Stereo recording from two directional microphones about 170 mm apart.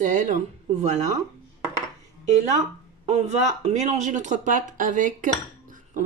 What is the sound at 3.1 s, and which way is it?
Speech, 35° right (ahead or behind).